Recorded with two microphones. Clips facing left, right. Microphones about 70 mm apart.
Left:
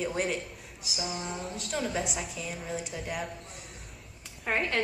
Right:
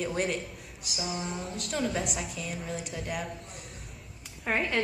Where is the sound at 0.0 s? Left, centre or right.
Centre.